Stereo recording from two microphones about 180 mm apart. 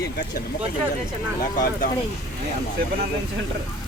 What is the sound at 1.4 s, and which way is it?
Speech, 50° left (ahead or behind).